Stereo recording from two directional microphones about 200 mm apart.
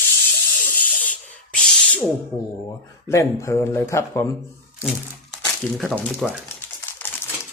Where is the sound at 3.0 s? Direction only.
15° left (ahead or behind).